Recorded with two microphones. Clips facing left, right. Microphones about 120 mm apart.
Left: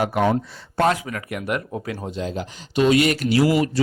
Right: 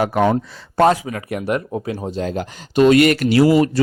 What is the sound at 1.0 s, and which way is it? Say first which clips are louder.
Speech: right 4 dB; 30° right (ahead or behind).